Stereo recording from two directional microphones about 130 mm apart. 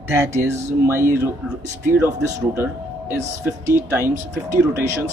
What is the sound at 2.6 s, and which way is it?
Speech, 20° right (ahead or behind).